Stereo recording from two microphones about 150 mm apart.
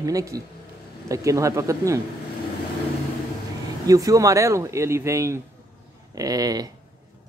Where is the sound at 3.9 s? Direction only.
20° right (ahead or behind).